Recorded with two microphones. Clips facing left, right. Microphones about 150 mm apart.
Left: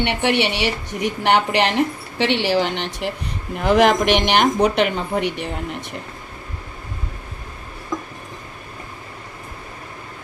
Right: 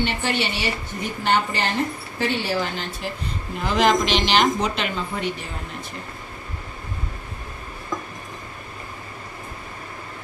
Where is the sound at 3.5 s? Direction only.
60° left (ahead or behind).